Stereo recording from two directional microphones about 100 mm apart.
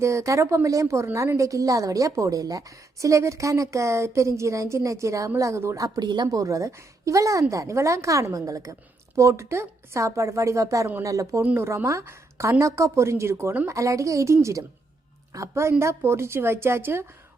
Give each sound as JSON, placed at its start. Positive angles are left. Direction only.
{"t": 0.0, "sound": "a woman's voice", "side_deg": -30}